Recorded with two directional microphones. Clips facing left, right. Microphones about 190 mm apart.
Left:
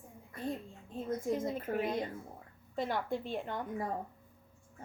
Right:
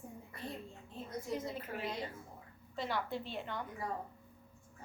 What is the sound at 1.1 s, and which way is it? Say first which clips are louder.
A woman's voice: left 6 dB; 50° left (ahead or behind).